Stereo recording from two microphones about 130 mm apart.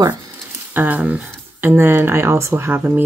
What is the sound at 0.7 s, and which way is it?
Speech, 10° right (ahead or behind).